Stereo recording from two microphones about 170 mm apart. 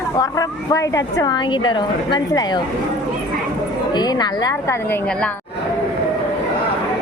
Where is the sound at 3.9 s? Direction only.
25° left (ahead or behind).